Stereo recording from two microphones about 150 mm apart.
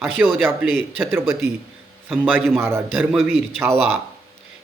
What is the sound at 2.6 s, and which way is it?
Speech, 15° right (ahead or behind).